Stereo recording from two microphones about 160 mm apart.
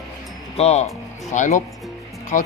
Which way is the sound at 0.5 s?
40° left (ahead or behind).